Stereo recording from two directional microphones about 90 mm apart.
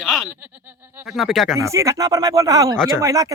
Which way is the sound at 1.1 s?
Centre (ahead or behind).